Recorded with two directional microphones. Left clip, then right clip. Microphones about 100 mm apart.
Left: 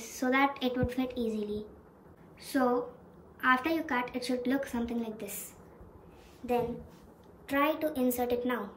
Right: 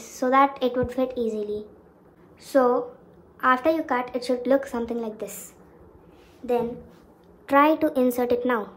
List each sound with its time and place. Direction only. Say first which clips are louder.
0.0 s a woman's voice: right 9 dB; 25° right (ahead or behind)
7.4 s a woman's voice: right 11 dB; 40° right (ahead or behind)